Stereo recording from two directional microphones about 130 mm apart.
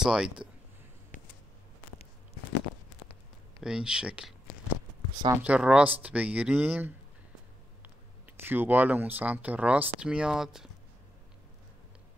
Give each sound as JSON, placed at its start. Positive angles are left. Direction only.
{"t": 0.0, "sound": "speech", "side_deg": -5}
{"t": 3.6, "sound": "speech", "side_deg": -5}
{"t": 8.4, "sound": "speech", "side_deg": -15}